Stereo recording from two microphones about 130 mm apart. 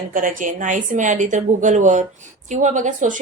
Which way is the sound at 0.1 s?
90° right.